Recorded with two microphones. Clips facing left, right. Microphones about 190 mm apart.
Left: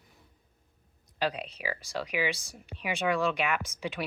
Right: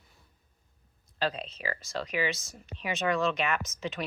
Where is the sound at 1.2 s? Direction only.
15° left (ahead or behind).